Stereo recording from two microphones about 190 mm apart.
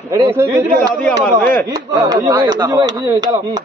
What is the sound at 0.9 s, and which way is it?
Speech, 10° left (ahead or behind).